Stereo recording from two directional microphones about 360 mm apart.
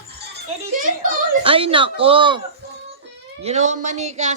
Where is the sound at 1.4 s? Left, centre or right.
Centre.